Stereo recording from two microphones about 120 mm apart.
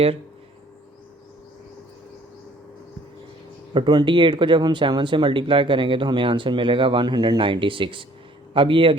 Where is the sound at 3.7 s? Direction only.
40° right (ahead or behind).